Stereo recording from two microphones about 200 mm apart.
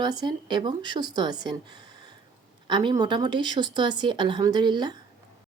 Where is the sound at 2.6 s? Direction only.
20° right (ahead or behind).